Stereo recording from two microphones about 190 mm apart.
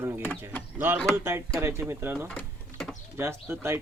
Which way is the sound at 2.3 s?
5° left (ahead or behind).